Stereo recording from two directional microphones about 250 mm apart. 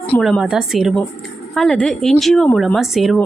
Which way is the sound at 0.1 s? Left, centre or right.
Centre.